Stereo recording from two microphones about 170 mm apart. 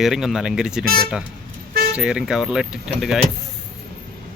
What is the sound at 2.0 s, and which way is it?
Speech, 5° right (ahead or behind).